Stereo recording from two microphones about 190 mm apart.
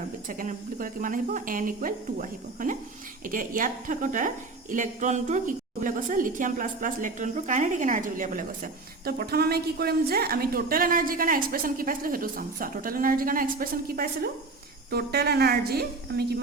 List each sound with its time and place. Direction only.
0.3 s speech: 45° right (ahead or behind)
4.7 s a sound: 40° right (ahead or behind)
5.8 s a woman's voice: 45° right (ahead or behind)